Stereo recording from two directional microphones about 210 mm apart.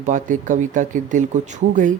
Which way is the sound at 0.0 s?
35° right (ahead or behind).